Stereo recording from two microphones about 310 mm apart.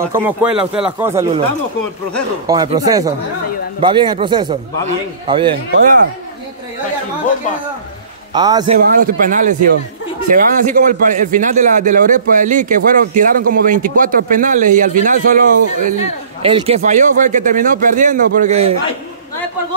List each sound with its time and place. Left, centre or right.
0.0 s speech: centre
2.4 s speech: centre
8.3 s a man's voice: centre
8.7 s a man's voice: right